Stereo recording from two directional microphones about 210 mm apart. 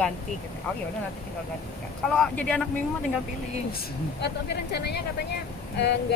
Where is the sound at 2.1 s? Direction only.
5° left (ahead or behind).